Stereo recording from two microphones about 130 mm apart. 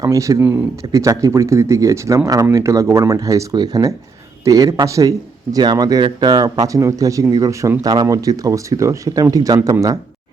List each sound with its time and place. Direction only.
0.0 s speech: 25° right (ahead or behind)